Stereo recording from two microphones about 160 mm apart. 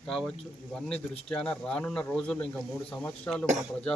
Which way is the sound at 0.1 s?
5° left (ahead or behind).